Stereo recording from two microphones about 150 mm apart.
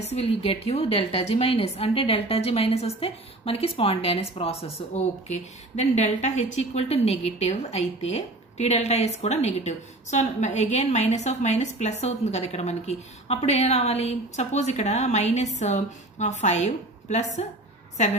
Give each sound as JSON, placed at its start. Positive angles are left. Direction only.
{"t": 0.0, "sound": "a woman's voice", "side_deg": 45}